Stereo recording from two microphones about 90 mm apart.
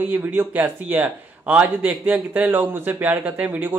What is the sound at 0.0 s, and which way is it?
Speech, 25° right (ahead or behind).